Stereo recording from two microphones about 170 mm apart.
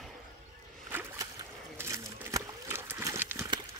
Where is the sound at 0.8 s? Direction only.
15° right (ahead or behind).